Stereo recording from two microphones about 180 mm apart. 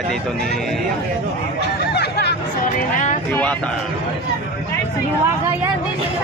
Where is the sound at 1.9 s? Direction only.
65° left (ahead or behind).